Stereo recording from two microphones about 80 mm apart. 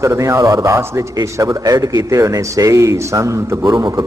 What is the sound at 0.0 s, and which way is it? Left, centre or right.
A man's voice, right.